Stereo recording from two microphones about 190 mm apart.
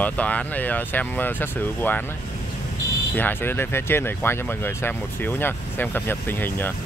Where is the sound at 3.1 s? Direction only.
10° left (ahead or behind).